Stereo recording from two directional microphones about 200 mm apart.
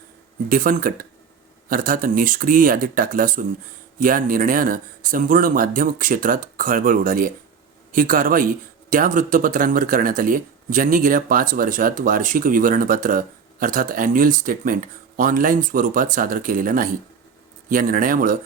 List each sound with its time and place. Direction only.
0.4 s speech: 45° right (ahead or behind)